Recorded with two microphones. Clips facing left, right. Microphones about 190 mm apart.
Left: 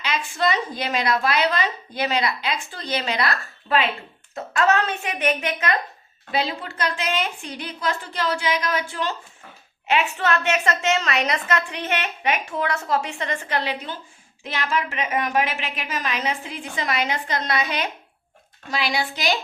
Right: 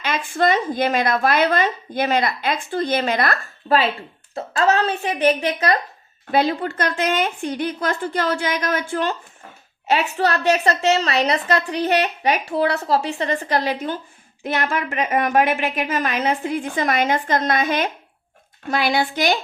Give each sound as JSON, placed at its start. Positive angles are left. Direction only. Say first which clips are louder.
{"t": 0.0, "sound": "a sound", "louder": "right 3 dB", "side_deg": -50}
{"t": 0.3, "sound": "a woman's voice", "louder": "right 6 dB", "side_deg": -50}
{"t": 4.4, "sound": "a woman's voice", "louder": "right 2 dB", "side_deg": -30}
{"t": 6.3, "sound": "a woman's voice", "louder": "right 7 dB", "side_deg": -55}
{"t": 9.8, "sound": "a woman's voice", "louder": "right 3 dB", "side_deg": -40}